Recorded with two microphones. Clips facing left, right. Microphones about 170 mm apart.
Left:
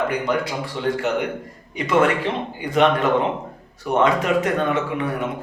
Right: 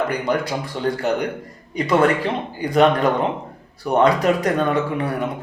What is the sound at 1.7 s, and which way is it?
Speech, 35° right (ahead or behind).